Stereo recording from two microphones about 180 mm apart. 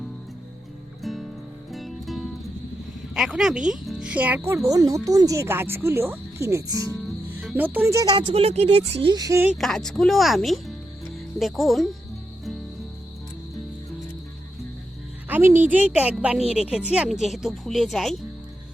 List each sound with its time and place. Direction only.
1.0 s music: centre (ahead or behind)
3.2 s speech: 5° right (ahead or behind)
9.6 s speech: centre (ahead or behind)
15.3 s speech: 15° right (ahead or behind)